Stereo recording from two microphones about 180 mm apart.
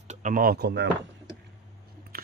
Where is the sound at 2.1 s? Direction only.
55° right (ahead or behind).